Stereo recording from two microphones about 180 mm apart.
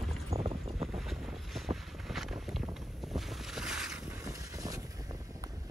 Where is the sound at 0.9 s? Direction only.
Centre (ahead or behind).